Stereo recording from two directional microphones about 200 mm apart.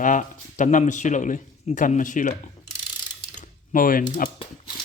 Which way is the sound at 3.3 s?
40° left (ahead or behind).